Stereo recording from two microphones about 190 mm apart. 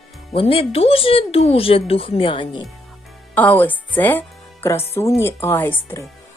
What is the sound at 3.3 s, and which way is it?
Speech, 10° left (ahead or behind).